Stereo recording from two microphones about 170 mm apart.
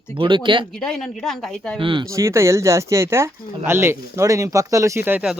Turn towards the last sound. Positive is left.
turn(degrees=-10)  # may be behind; listen again after turning